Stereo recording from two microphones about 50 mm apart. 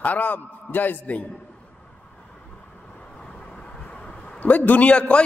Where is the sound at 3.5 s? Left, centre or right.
Left.